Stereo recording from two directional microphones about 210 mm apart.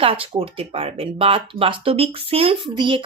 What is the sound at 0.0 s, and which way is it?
Speech, 25° right (ahead or behind).